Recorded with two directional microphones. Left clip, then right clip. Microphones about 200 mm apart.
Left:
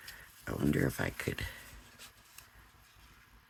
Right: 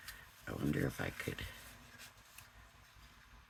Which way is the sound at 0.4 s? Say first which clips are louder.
Left 6 dB; 50° left (ahead or behind).